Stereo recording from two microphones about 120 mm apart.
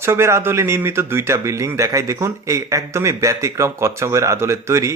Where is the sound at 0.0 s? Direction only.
20° right (ahead or behind).